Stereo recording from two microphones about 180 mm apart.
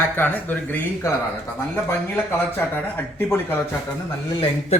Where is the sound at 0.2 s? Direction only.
10° left (ahead or behind).